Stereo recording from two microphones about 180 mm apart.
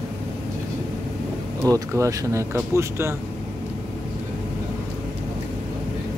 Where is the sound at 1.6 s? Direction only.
15° right (ahead or behind).